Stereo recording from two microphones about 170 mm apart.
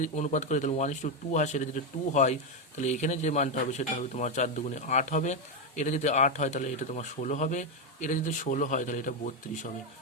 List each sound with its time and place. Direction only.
0.0 s speech: 45° left (ahead or behind)